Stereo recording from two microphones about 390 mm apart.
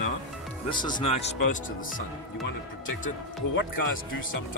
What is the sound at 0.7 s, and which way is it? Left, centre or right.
Speech, centre.